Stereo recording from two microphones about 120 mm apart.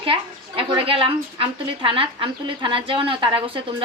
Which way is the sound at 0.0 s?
50° right (ahead or behind).